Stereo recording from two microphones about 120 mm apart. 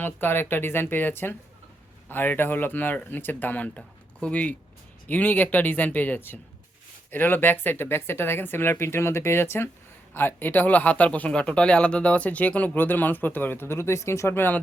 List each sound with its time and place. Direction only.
0.0 s speech: 15° left (ahead or behind)